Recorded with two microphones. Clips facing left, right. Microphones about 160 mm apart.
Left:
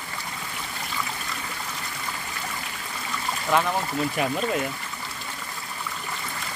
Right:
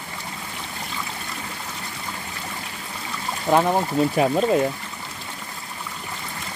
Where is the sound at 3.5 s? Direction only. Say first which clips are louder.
Right 5 dB; 35° right (ahead or behind).